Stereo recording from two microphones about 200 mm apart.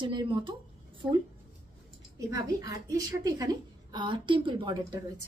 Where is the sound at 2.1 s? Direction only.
15° right (ahead or behind).